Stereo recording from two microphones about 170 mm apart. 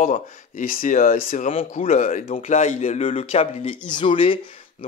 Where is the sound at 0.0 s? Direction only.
50° left (ahead or behind); by 4.4 s 30° left (ahead or behind).